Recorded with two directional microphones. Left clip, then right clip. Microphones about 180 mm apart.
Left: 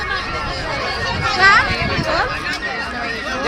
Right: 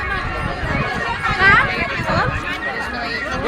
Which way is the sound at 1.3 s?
65° left (ahead or behind).